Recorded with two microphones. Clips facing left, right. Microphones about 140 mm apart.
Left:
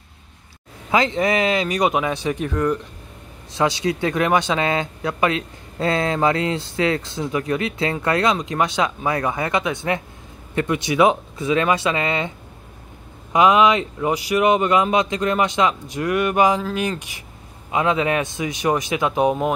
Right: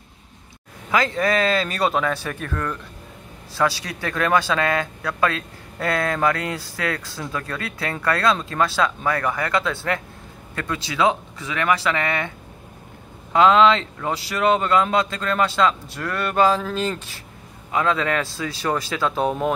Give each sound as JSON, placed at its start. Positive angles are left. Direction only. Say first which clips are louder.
{"t": 0.9, "sound": "speech", "louder": "left 2 dB", "side_deg": 25}
{"t": 13.3, "sound": "speech", "louder": "even", "side_deg": 15}